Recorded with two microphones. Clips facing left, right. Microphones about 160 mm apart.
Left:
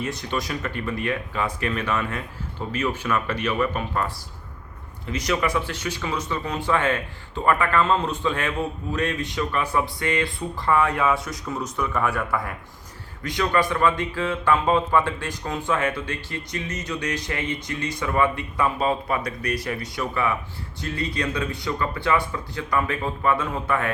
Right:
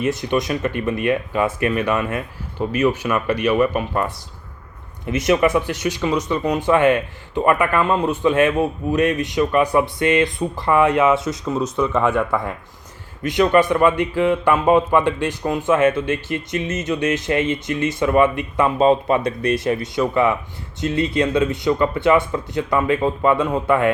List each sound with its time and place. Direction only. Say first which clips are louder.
0.0 s speech: right 8 dB; 20° right (ahead or behind)